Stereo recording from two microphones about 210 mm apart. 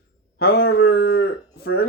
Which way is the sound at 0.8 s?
90° left.